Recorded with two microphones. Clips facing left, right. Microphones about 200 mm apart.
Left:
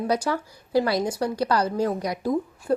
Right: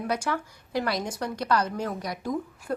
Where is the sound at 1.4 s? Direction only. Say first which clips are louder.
Left 3 dB; 35° left (ahead or behind).